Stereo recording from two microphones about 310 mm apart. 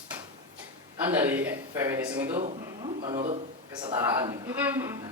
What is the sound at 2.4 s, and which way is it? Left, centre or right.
A man's voice, centre.